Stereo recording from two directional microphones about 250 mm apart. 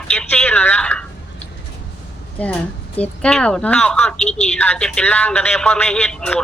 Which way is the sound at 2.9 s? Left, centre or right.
Centre.